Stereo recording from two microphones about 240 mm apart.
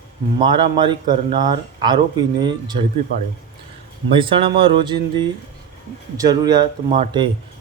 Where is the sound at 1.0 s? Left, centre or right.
Right.